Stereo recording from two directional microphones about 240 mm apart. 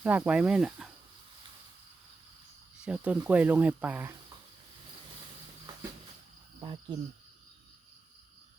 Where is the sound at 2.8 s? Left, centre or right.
Centre.